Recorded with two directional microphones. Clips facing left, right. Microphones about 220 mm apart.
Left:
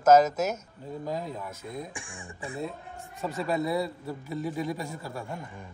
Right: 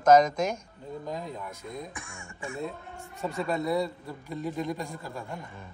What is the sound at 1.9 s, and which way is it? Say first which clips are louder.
Speech: left 1 dB; 30° left (ahead or behind).